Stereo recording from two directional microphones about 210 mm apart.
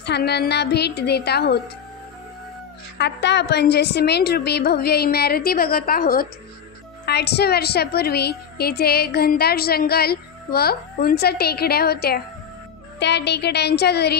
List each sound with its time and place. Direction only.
0.0 s a woman's voice: 50° left (ahead or behind)
3.0 s a woman's voice: 55° left (ahead or behind)